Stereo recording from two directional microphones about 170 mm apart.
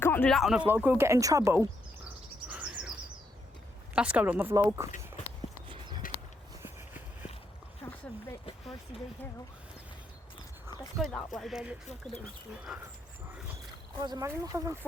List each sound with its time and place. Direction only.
0.0 s a sound: 10° left (ahead or behind)
0.3 s speech: centre (ahead or behind); by 1.6 s 20° right (ahead or behind)
2.5 s bird: 10° right (ahead or behind)
3.9 s speech: 10° right (ahead or behind)
5.6 s horse: 30° right (ahead or behind)
10.9 s speech: centre (ahead or behind)
14.0 s speech: 25° right (ahead or behind)